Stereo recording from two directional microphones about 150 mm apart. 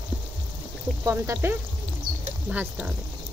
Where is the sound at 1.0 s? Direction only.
20° right (ahead or behind).